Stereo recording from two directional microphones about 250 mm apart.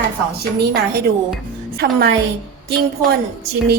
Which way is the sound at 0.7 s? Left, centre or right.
Right.